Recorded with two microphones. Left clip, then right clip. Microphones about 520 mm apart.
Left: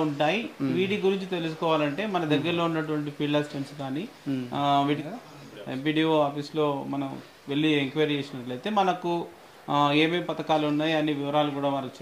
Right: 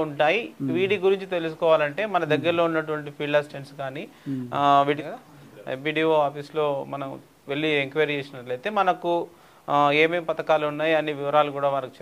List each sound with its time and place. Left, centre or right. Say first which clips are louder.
0.2 s speech: right 4 dB; right
4.5 s speech: right 6 dB; right
5.7 s speech: right 3 dB; right